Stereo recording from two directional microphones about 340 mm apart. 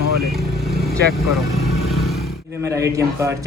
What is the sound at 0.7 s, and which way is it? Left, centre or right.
Vehicle, right.